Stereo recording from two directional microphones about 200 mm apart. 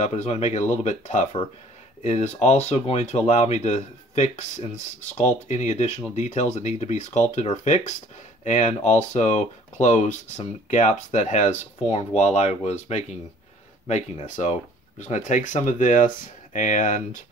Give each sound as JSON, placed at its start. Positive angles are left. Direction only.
{"t": 0.0, "sound": "speech", "side_deg": 35}